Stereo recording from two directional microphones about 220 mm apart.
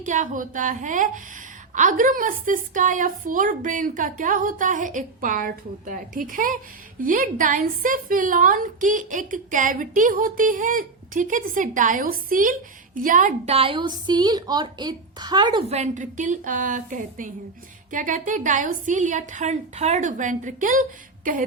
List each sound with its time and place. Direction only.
0.0 s a woman's voice: 35° right (ahead or behind)